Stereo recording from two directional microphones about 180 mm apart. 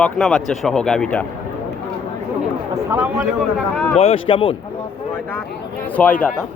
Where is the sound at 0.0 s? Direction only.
5° left (ahead or behind).